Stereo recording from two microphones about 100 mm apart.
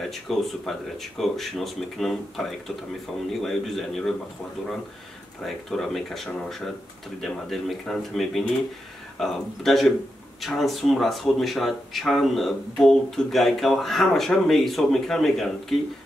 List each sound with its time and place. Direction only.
0.0 s speech: centre (ahead or behind)
5.4 s speech: centre (ahead or behind)